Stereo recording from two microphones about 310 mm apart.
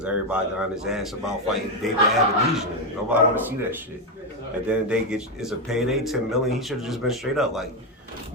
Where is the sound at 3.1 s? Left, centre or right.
Centre.